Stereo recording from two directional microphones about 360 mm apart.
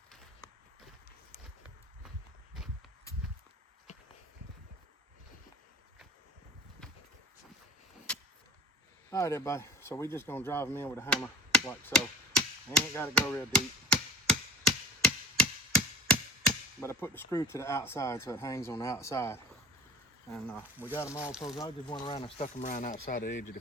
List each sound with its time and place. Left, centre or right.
2.6 s walk: centre
9.0 s a sound: centre
16.8 s speech: centre
21.2 s speech: centre
21.5 s speech: centre